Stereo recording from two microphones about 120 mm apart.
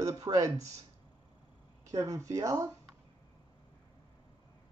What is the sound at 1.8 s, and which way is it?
Speech, 25° right (ahead or behind).